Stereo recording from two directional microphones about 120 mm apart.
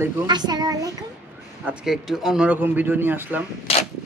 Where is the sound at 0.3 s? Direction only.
35° right (ahead or behind).